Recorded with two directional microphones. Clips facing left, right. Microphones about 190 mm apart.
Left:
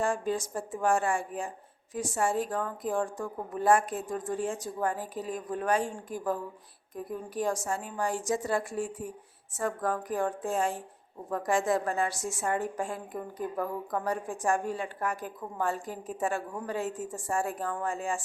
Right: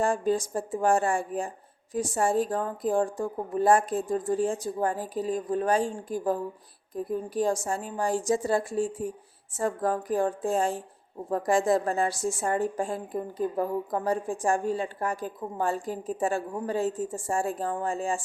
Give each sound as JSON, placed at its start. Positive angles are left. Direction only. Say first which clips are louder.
{"t": 0.0, "sound": "a woman's voice", "louder": "right 4 dB", "side_deg": -35}